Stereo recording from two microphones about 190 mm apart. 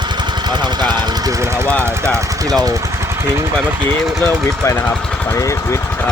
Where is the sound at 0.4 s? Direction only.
25° right (ahead or behind).